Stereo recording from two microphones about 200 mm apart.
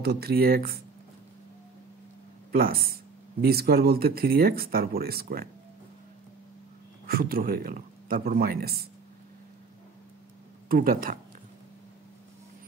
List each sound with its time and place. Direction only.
0.0 s speech: 50° right (ahead or behind)
2.5 s speech: 50° right (ahead or behind)
7.1 s speech: 50° right (ahead or behind)
10.7 s speech: 45° right (ahead or behind)